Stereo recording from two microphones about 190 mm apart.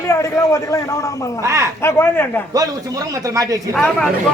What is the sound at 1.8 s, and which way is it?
Speech, 15° left (ahead or behind).